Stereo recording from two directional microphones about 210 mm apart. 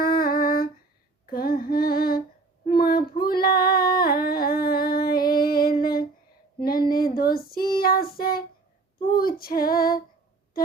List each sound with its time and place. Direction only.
0.0 s humming: 45° left (ahead or behind)
1.3 s female singing: 45° left (ahead or behind)
6.9 s child singing: 45° left (ahead or behind)
9.1 s female singing: 45° left (ahead or behind)